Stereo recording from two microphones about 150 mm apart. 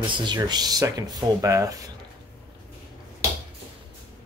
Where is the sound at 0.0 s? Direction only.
30° right (ahead or behind).